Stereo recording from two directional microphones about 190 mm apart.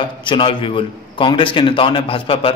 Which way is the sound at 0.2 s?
25° left (ahead or behind).